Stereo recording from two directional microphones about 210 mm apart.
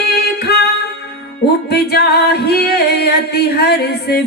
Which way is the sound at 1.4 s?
50° left (ahead or behind).